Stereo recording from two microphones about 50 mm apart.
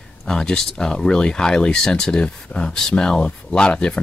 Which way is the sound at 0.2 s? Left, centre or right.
Centre.